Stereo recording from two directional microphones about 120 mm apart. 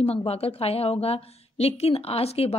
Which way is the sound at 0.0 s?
55° left (ahead or behind).